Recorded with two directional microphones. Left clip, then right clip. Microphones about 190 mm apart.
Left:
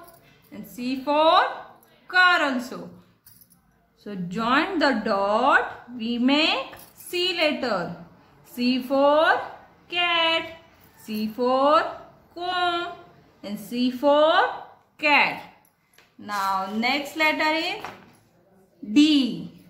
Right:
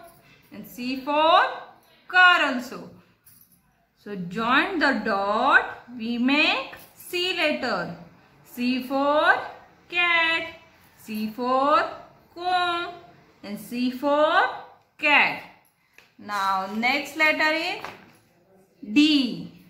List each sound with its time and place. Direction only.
0.5 s a woman's voice: 5° left (ahead or behind)
4.0 s a woman's voice: 5° left (ahead or behind)
8.8 s a woman's voice: 5° left (ahead or behind)
18.9 s speech: 10° left (ahead or behind)